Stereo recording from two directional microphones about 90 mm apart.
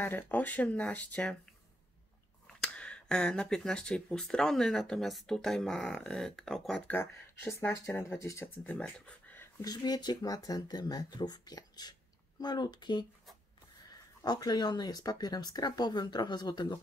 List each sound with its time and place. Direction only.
0.0 s speech: 20° left (ahead or behind)
2.4 s speech: 10° left (ahead or behind)
6.9 s speech: 25° left (ahead or behind)
8.8 s speech: 5° left (ahead or behind)
9.6 s speech: 45° left (ahead or behind)
14.2 s speech: 50° left (ahead or behind)